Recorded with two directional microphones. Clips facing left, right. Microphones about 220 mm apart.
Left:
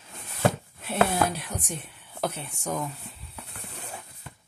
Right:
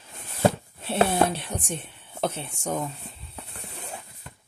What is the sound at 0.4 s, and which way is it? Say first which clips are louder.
Speech: right 3 dB; 30° right (ahead or behind).